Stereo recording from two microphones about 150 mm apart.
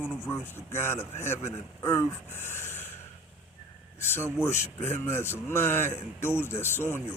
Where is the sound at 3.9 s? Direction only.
15° left (ahead or behind).